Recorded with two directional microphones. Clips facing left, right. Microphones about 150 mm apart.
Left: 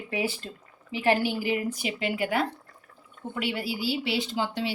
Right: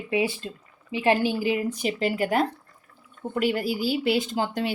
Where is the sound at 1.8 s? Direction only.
40° right (ahead or behind).